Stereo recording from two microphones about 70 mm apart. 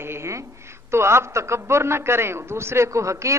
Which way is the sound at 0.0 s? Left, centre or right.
Right.